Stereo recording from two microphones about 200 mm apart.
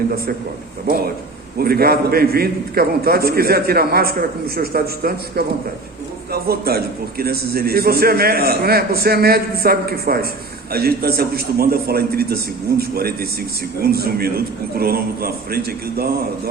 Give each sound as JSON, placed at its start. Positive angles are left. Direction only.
{"t": 1.5, "sound": "a man's voice", "side_deg": -50}